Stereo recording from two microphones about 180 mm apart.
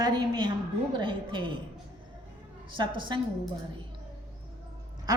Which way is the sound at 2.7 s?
25° right (ahead or behind).